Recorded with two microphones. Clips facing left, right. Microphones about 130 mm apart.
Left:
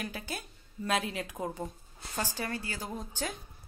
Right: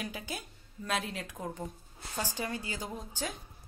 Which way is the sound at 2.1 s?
15° right (ahead or behind).